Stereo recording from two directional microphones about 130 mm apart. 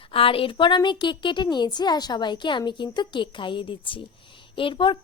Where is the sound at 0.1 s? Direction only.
45° left (ahead or behind).